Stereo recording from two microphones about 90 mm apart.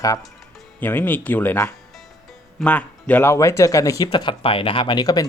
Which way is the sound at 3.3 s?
35° left (ahead or behind).